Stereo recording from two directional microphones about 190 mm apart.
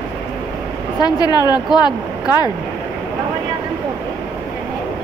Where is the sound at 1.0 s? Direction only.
20° left (ahead or behind).